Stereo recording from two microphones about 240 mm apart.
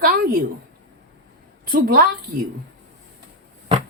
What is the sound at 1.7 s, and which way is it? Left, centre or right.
Speech, right.